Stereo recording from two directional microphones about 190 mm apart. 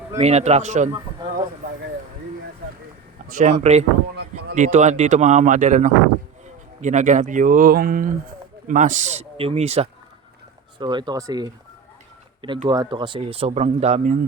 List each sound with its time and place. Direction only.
0.2 s speech: 35° right (ahead or behind)
3.2 s speech: 45° right (ahead or behind); by 11.5 s 20° right (ahead or behind)
12.6 s speech: 20° right (ahead or behind); by 14.2 s 40° right (ahead or behind)